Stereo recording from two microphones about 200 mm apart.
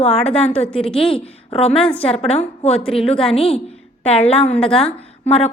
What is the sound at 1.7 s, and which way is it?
Speech, 5° left (ahead or behind).